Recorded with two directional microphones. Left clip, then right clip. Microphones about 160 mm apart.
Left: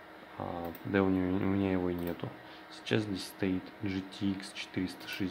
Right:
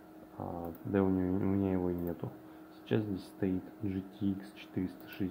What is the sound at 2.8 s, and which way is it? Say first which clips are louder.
Speech: left 2 dB; 5° right (ahead or behind).